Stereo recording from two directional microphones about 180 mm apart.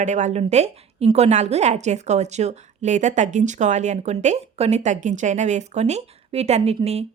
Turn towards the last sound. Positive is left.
turn(degrees=-35)  # may be behind; listen again after turning